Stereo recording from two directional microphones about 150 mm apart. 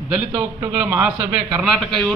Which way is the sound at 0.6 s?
10° right (ahead or behind).